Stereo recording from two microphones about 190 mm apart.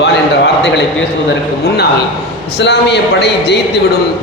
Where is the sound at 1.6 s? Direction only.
55° left (ahead or behind).